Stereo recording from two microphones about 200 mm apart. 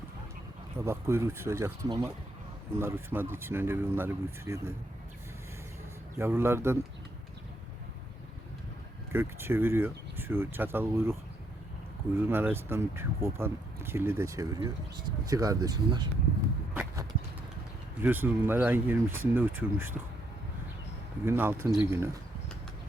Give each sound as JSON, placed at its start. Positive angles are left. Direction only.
{"t": 0.9, "sound": "speech", "side_deg": -15}
{"t": 6.1, "sound": "speech", "side_deg": -10}
{"t": 9.1, "sound": "speech", "side_deg": -10}
{"t": 12.3, "sound": "speech", "side_deg": -10}
{"t": 16.7, "sound": "walk", "side_deg": -15}
{"t": 18.0, "sound": "speech", "side_deg": -10}
{"t": 21.2, "sound": "speech", "side_deg": -10}